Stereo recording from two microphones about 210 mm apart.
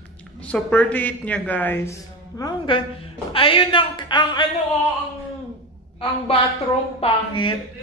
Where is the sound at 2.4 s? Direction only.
20° left (ahead or behind).